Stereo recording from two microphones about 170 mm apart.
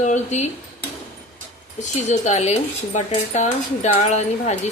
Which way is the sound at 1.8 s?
45° left (ahead or behind).